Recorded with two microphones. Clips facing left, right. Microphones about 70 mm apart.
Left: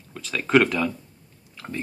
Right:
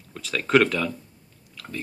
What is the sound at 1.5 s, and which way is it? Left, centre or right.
Chewing, left.